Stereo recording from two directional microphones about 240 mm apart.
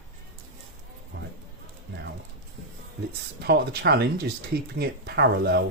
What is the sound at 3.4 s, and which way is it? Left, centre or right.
Speech, right.